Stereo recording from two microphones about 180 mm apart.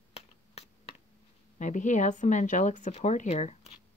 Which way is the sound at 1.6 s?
45° left (ahead or behind).